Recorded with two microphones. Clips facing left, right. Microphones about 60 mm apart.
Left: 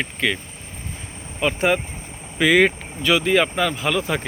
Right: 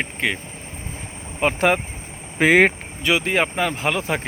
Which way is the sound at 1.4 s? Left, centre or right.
Right.